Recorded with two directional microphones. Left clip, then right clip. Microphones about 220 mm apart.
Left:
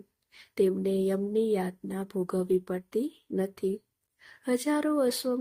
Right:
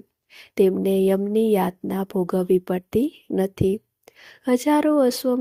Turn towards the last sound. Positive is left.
turn(degrees=-25)  # may be behind; listen again after turning